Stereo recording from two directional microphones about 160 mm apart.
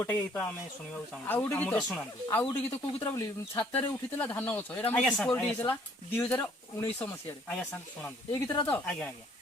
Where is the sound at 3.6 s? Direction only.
10° left (ahead or behind).